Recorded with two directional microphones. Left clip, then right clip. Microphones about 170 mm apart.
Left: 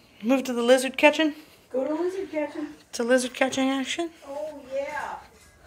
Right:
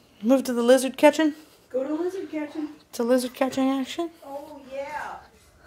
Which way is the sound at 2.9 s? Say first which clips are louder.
Even; 30° right (ahead or behind).